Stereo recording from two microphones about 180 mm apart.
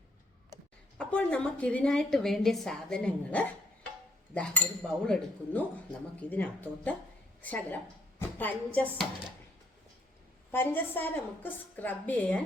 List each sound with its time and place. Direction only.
0.9 s a woman's voice: 5° left (ahead or behind)
8.2 s a sound: 10° left (ahead or behind)
10.5 s a woman's voice: 10° left (ahead or behind)